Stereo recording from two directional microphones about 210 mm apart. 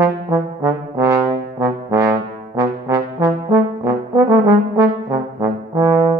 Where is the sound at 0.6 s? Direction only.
15° right (ahead or behind).